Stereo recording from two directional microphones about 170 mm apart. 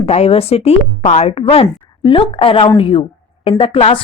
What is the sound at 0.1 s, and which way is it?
Speech, 35° left (ahead or behind).